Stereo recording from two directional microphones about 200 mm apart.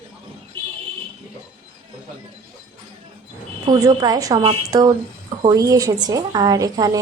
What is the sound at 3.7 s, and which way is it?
A woman's voice, 20° right (ahead or behind).